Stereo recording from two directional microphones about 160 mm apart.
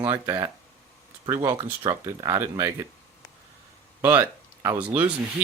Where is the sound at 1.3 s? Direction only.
30° right (ahead or behind).